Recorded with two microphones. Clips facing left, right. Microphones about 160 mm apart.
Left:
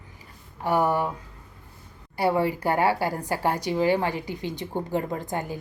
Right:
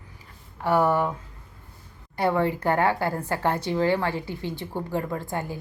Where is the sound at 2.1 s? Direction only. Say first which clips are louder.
Even; 10° left (ahead or behind).